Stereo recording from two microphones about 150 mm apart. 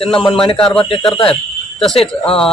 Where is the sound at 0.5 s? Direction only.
5° left (ahead or behind).